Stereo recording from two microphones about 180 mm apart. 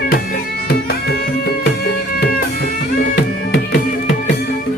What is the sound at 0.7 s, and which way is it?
Music, 55° left (ahead or behind).